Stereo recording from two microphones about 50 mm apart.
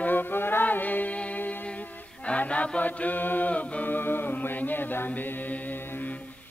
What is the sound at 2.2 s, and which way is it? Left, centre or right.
Chant, left.